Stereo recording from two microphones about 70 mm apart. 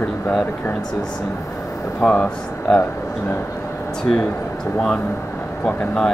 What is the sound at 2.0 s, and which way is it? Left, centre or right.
Speech, centre.